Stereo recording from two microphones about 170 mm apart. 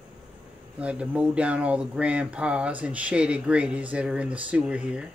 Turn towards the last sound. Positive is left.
turn(degrees=-5)  # may be behind; listen again after turning